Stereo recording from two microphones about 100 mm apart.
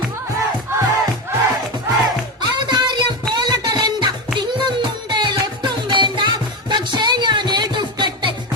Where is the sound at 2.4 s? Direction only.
45° right (ahead or behind).